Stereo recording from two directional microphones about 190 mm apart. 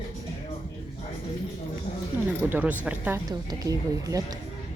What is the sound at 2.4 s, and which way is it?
Speech, 10° right (ahead or behind).